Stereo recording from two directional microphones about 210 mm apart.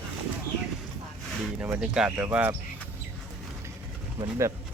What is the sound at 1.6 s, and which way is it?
Speech, 5° right (ahead or behind).